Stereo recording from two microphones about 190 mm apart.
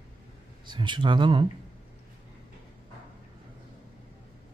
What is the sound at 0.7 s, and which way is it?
Speech, 25° right (ahead or behind).